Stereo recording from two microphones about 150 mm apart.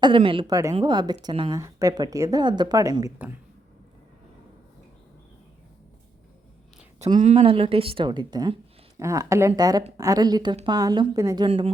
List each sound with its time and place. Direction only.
0.2 s speech: 35° right (ahead or behind)
0.5 s speech: 20° right (ahead or behind)
7.2 s speech: 45° right (ahead or behind); by 8.5 s 30° right (ahead or behind)
9.0 s speech: 20° right (ahead or behind)
11.4 s speech: 40° right (ahead or behind)